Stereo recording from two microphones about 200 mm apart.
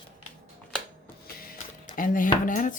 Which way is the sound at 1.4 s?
45° left (ahead or behind).